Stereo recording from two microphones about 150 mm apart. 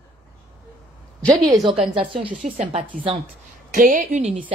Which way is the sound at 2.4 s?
60° right (ahead or behind).